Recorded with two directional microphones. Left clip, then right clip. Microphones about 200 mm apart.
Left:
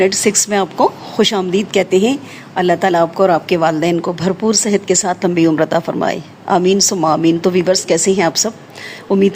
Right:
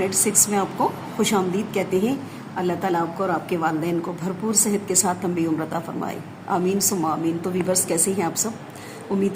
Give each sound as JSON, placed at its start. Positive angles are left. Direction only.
{"t": 0.0, "sound": "speech", "side_deg": 45}